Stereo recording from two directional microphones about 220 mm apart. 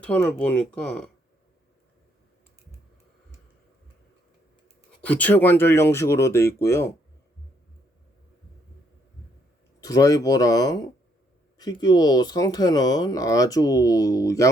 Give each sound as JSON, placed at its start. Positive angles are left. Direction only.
{"t": 0.0, "sound": "speech", "side_deg": 5}
{"t": 4.9, "sound": "speech", "side_deg": 5}
{"t": 9.8, "sound": "speech", "side_deg": 15}